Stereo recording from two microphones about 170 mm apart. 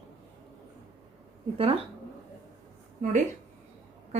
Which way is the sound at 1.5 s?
35° right (ahead or behind).